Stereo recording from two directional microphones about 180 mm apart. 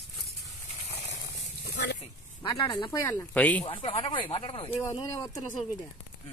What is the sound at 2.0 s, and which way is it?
Speech, 25° left (ahead or behind).